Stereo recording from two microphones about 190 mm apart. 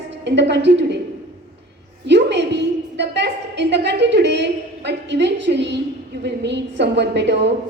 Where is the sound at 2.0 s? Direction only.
65° right (ahead or behind).